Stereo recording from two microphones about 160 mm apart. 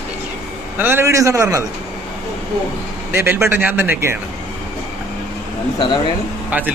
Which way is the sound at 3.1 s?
15° right (ahead or behind).